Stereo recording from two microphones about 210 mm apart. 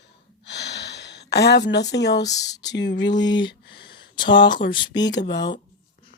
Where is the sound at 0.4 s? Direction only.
55° left (ahead or behind).